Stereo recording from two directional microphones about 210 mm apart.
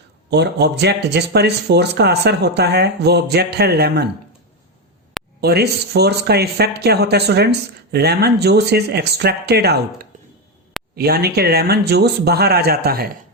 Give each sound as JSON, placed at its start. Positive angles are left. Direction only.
{"t": 0.3, "sound": "speech", "side_deg": -50}
{"t": 5.4, "sound": "speech", "side_deg": -50}